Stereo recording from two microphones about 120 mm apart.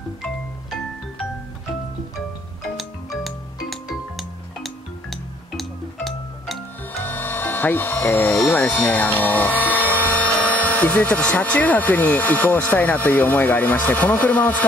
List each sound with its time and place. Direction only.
0.2 s music: 5° left (ahead or behind)
3.3 s music: centre (ahead or behind)
7.0 s music: 15° left (ahead or behind)
8.5 s speech: 10° left (ahead or behind)